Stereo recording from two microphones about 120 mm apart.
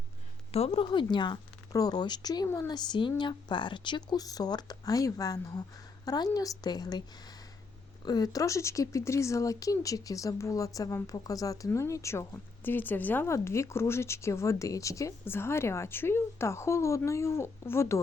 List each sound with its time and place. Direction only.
0.5 s speech: 50° left (ahead or behind); by 18.0 s 20° left (ahead or behind)